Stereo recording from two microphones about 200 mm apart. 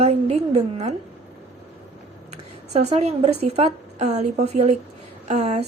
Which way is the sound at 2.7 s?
30° right (ahead or behind).